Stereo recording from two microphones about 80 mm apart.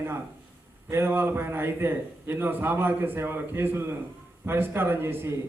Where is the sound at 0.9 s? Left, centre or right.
Right.